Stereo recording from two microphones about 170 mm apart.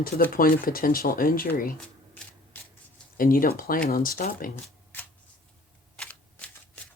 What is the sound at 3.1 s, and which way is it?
Speech, 55° left (ahead or behind).